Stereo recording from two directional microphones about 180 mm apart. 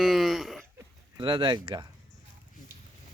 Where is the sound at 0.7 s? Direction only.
25° right (ahead or behind).